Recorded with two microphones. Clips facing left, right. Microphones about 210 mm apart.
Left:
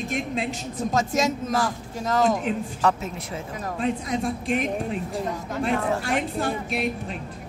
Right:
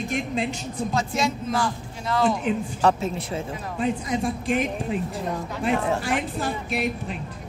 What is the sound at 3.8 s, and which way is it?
A man's voice, centre (ahead or behind).